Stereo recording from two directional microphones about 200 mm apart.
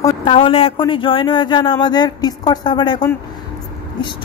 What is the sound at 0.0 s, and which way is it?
A woman's voice, 25° left (ahead or behind).